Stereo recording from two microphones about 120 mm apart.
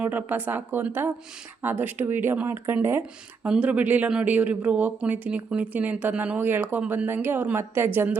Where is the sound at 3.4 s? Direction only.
10° right (ahead or behind).